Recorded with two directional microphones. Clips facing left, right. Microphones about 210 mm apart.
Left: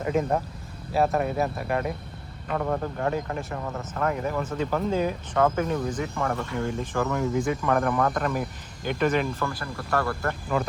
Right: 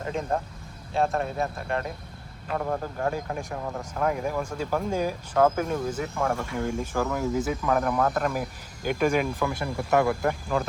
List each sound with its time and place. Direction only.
0.9 s speech: 5° left (ahead or behind); by 10.3 s 15° right (ahead or behind)